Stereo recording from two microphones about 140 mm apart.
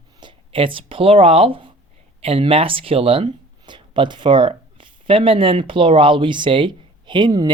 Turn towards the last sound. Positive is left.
turn(degrees=-30)  # may be behind; listen again after turning